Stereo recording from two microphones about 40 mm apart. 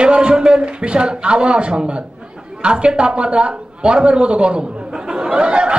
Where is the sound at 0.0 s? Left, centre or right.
Right.